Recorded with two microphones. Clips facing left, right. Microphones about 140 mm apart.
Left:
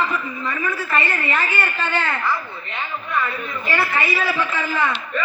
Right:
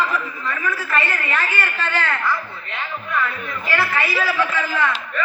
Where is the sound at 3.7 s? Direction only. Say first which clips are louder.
Even; 25° left (ahead or behind).